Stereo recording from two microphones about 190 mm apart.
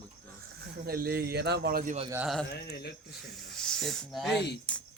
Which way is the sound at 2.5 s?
60° left (ahead or behind).